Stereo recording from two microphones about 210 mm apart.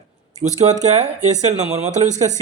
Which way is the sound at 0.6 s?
35° right (ahead or behind).